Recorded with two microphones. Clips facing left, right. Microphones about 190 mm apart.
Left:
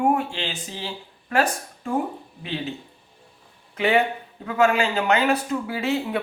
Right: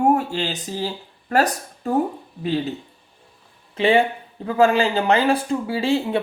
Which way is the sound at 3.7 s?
30° right (ahead or behind).